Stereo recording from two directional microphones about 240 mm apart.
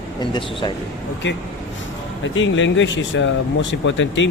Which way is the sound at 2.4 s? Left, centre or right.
Left.